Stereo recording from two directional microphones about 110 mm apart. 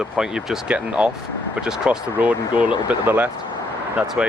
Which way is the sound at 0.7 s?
10° right (ahead or behind).